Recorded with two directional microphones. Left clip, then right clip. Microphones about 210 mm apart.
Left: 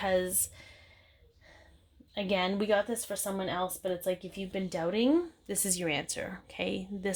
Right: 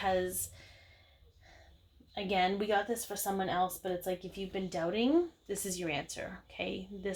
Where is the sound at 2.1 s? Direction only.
40° left (ahead or behind).